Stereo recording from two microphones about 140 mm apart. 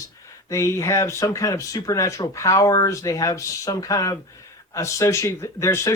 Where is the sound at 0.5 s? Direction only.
20° left (ahead or behind).